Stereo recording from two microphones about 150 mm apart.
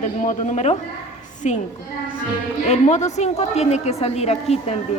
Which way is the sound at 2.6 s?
50° left (ahead or behind).